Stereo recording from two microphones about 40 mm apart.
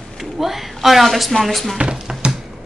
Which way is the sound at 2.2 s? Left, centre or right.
Right.